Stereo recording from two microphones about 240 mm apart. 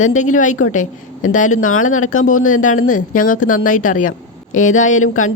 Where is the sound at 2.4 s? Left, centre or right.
Left.